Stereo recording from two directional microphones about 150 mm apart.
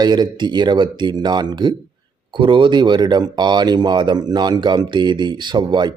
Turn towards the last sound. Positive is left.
turn(degrees=-30)  # may be behind; listen again after turning